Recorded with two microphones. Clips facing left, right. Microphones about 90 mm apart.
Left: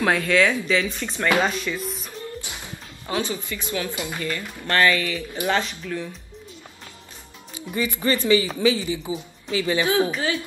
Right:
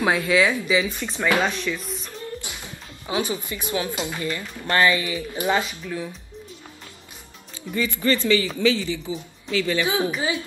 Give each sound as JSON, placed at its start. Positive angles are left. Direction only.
{"t": 0.0, "sound": "speech", "side_deg": -10}
{"t": 1.4, "sound": "speech", "side_deg": 0}
{"t": 3.1, "sound": "speech", "side_deg": -15}
{"t": 5.6, "sound": "speech", "side_deg": -10}
{"t": 7.5, "sound": "speech", "side_deg": 20}
{"t": 10.1, "sound": "speech", "side_deg": -15}